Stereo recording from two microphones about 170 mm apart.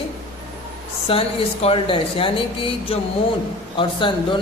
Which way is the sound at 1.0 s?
35° left (ahead or behind).